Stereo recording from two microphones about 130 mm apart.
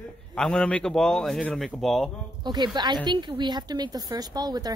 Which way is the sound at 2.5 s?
35° right (ahead or behind).